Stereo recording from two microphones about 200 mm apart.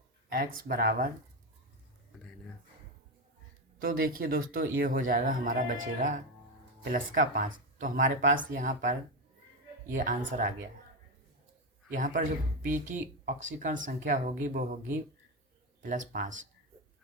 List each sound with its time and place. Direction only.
0.3 s speech: 50° right (ahead or behind)
3.8 s speech: 45° right (ahead or behind)
11.9 s speech: 40° right (ahead or behind)